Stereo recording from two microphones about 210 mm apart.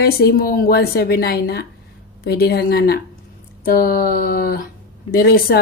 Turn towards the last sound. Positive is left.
turn(degrees=45)  # may be behind; listen again after turning